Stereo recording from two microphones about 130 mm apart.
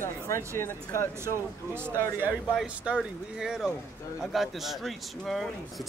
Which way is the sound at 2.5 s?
5° right (ahead or behind).